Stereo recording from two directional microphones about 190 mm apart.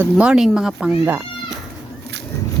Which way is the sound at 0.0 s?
5° right (ahead or behind).